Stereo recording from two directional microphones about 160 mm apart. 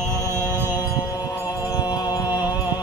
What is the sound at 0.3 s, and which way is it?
Music, 15° right (ahead or behind).